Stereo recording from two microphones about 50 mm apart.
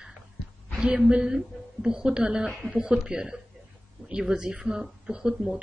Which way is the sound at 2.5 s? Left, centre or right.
Centre.